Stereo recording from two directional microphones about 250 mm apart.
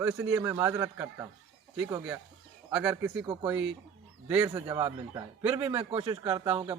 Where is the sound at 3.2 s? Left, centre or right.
Centre.